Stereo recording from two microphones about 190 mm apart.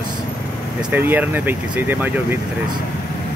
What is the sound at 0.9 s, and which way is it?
Speech, 10° right (ahead or behind).